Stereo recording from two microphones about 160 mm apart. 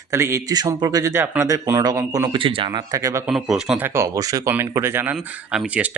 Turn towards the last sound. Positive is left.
turn(degrees=-10)  # may be behind; listen again after turning